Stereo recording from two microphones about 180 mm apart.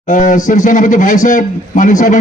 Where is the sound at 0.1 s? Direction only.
45° left (ahead or behind).